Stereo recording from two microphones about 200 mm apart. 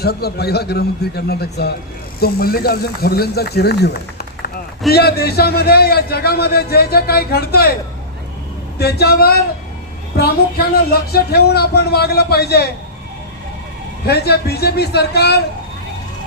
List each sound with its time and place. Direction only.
0.0 s a man's voice: 50° left (ahead or behind)
8.8 s a man's voice: 55° left (ahead or behind)
11.1 s a man's voice: 55° left (ahead or behind)
14.1 s a man's voice: 55° left (ahead or behind)